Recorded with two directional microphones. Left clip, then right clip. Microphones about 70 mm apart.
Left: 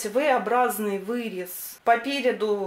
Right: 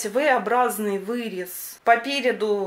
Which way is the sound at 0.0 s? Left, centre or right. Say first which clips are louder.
Right 2 dB; right.